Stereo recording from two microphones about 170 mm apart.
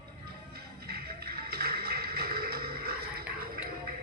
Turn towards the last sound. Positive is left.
turn(degrees=-60)  # may be behind; listen again after turning